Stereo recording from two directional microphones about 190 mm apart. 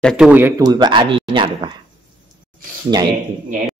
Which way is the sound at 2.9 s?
25° right (ahead or behind).